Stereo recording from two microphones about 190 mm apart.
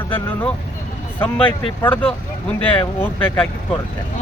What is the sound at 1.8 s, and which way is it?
Speech, 10° left (ahead or behind).